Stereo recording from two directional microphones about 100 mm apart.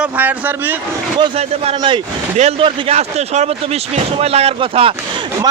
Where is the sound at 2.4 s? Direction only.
70° right (ahead or behind).